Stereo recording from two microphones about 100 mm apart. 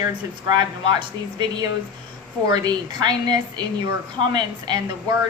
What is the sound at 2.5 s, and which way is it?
A woman's voice, 45° right (ahead or behind).